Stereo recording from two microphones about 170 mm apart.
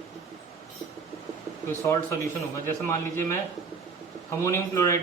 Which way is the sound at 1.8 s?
15° left (ahead or behind).